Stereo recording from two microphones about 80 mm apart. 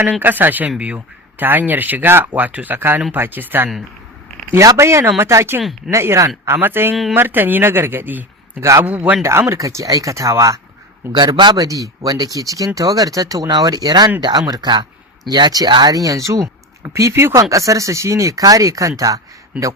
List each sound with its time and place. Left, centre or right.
0.0 s speech: right
4.6 s speech: right
9.6 s speech: right
11.1 s speech: right
11.5 s speech: right